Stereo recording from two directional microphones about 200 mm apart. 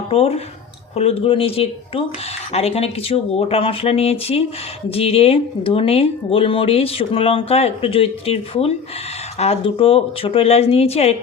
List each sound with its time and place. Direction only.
0.1 s speech: 30° left (ahead or behind)